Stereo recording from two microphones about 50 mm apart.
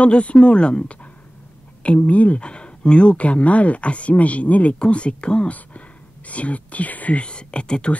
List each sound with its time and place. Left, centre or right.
0.0 s speech: left